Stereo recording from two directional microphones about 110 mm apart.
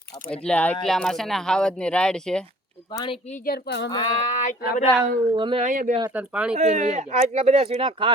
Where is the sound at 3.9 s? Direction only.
45° left (ahead or behind).